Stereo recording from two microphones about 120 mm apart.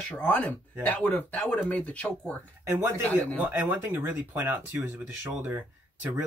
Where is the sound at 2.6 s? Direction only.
20° right (ahead or behind).